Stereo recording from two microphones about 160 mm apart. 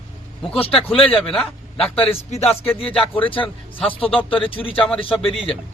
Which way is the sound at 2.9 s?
10° left (ahead or behind).